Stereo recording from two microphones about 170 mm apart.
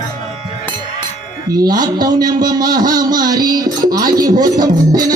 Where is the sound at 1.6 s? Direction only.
25° right (ahead or behind).